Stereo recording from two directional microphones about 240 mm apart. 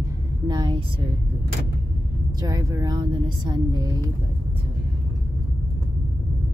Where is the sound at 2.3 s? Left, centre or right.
Centre.